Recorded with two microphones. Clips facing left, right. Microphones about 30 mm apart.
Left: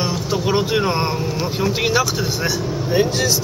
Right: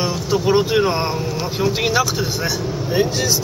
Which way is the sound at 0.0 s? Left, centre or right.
Centre.